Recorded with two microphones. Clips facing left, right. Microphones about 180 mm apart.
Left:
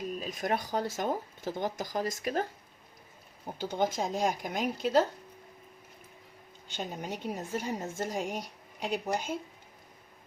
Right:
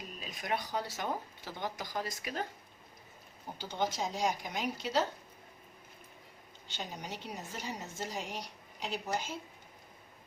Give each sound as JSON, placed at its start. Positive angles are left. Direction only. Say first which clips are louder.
{"t": 0.2, "sound": "speech", "louder": "left 2 dB", "side_deg": 45}
{"t": 3.6, "sound": "speech", "louder": "left 5 dB", "side_deg": 50}
{"t": 7.0, "sound": "speech", "louder": "left 7 dB", "side_deg": 50}